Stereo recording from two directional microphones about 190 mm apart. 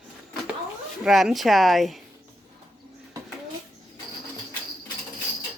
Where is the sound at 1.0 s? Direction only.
Centre (ahead or behind).